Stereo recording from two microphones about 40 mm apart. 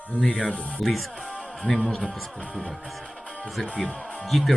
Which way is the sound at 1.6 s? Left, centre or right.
Left.